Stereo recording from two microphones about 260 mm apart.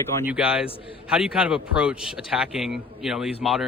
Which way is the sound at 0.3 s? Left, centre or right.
Centre.